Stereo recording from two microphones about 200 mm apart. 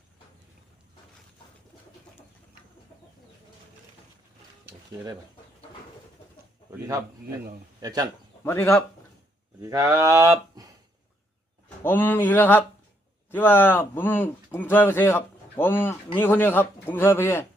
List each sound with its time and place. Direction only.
6.7 s speech: 15° right (ahead or behind)
8.4 s speech: 10° left (ahead or behind)
9.6 s speech: 15° right (ahead or behind)
11.8 s speech: 10° left (ahead or behind)